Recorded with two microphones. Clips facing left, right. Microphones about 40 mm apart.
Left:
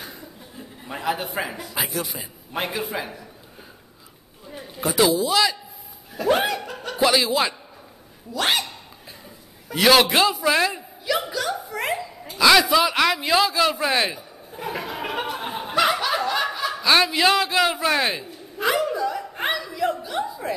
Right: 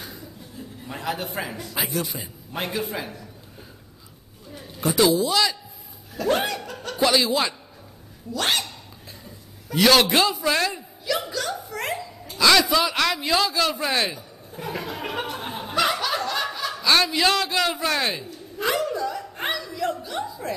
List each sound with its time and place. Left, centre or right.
0.0 s chuckle: centre
1.8 s a man's voice: centre
4.5 s a sound: centre
4.8 s a man's voice: centre
12.3 s a sound: centre
20.2 s chuckle: centre